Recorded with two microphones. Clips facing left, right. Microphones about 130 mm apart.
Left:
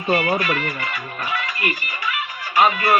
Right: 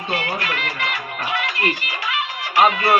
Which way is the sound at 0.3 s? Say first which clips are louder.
Left 3 dB; 75° right (ahead or behind).